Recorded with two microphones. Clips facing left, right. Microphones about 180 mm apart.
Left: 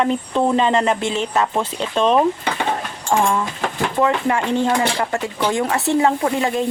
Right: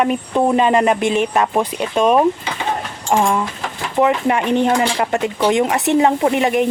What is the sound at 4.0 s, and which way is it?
Speech, 20° right (ahead or behind).